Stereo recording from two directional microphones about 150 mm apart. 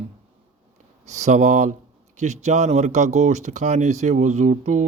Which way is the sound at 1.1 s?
50° right (ahead or behind).